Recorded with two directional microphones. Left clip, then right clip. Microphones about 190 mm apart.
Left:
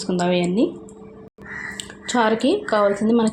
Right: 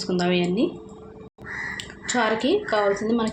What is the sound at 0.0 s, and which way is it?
Speech, 35° left (ahead or behind).